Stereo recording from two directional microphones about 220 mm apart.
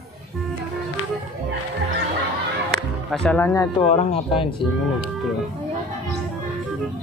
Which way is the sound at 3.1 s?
5° left (ahead or behind).